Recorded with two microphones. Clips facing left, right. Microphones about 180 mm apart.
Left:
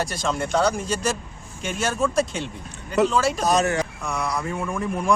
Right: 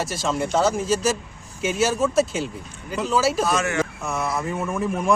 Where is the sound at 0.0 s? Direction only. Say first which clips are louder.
Right 1 dB; centre (ahead or behind).